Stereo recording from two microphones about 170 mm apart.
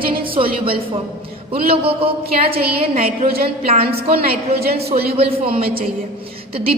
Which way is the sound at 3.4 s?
35° right (ahead or behind).